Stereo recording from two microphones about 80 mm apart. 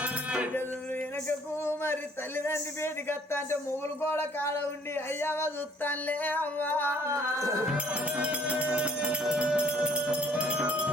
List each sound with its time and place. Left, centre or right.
0.0 s music: centre
1.3 s speech: left
7.1 s music: right
7.7 s music: centre